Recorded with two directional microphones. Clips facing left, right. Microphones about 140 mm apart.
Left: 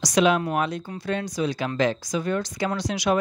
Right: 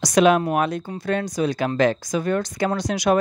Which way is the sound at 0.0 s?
50° right (ahead or behind).